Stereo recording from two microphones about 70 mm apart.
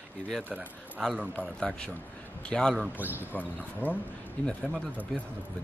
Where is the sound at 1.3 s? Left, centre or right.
Centre.